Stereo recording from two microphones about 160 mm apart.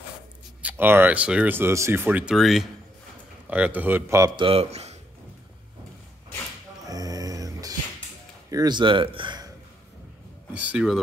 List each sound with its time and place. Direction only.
0.6 s a man's voice: 10° right (ahead or behind); by 4.9 s 40° right (ahead or behind)
6.8 s a sound: 20° right (ahead or behind)
8.5 s a man's voice: 25° right (ahead or behind)
10.5 s speech: 10° right (ahead or behind)